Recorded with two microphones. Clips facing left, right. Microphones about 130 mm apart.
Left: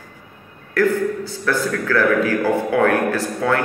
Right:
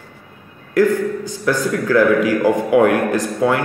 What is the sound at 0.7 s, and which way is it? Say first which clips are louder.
A man's voice: right 3 dB; 15° right (ahead or behind).